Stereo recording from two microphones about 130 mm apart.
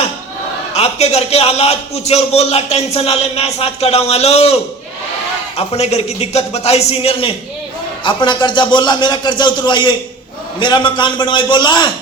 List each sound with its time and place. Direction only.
0.7 s a man's voice: 55° left (ahead or behind)
8.0 s speech: 35° left (ahead or behind)